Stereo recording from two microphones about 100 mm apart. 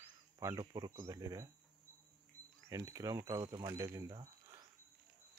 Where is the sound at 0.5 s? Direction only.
45° right (ahead or behind).